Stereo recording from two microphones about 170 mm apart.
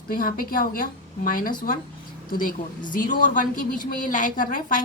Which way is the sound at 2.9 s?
50° left (ahead or behind).